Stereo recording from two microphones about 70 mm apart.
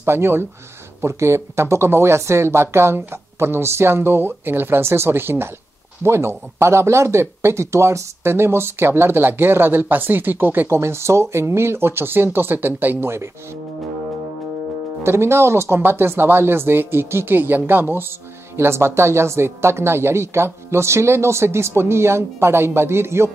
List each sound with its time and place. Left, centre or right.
0.0 s speech: right
10.8 s speech: right
15.0 s speech: right